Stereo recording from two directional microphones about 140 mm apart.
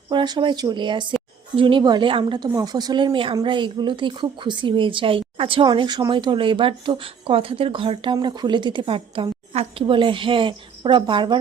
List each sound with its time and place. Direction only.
0.1 s speech: 35° right (ahead or behind)
9.5 s speech: 50° right (ahead or behind)
9.8 s speech: 35° right (ahead or behind)